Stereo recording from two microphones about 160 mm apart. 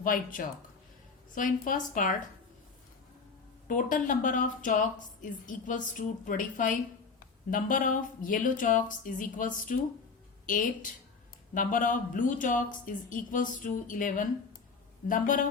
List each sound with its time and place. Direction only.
0.0 s a woman's voice: 60° left (ahead or behind)
3.7 s a woman's voice: 55° left (ahead or behind)